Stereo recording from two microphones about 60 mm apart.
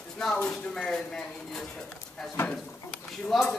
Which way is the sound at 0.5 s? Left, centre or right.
Centre.